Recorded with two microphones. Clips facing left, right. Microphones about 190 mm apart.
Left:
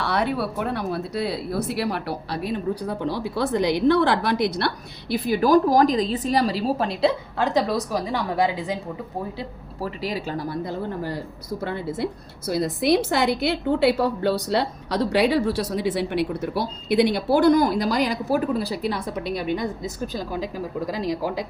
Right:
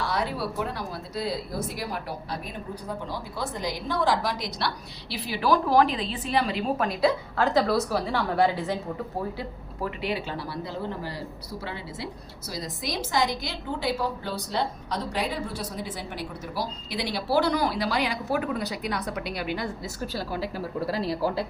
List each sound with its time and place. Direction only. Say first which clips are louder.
0.0 s speech: left 5 dB; 65° left (ahead or behind); by 8.8 s 15° left (ahead or behind)
9.4 s a woman's voice: left 2 dB; 35° left (ahead or behind); by 21.4 s 15° left (ahead or behind)